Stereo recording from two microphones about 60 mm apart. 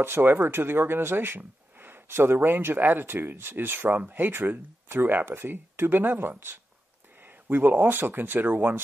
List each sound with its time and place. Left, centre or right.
0.0 s speech: right